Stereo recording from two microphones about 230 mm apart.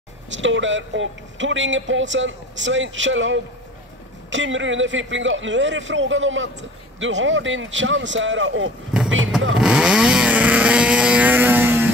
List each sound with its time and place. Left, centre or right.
0.4 s speech: right
9.6 s vehicle: centre